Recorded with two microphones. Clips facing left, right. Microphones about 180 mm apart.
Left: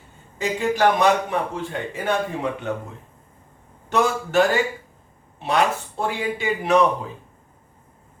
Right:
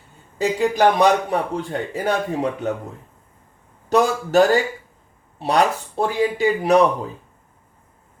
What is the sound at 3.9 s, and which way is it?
A man's voice, 40° right (ahead or behind).